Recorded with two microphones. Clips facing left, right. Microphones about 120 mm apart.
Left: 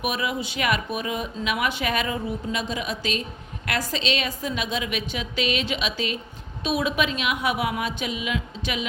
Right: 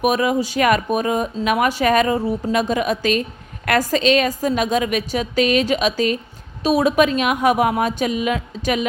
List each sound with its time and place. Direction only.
0.0 s speech: 40° right (ahead or behind)